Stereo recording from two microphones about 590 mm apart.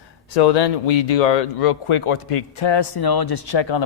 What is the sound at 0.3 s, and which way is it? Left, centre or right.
Speech, left.